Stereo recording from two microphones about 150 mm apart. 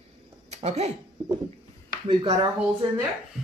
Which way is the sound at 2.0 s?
35° right (ahead or behind).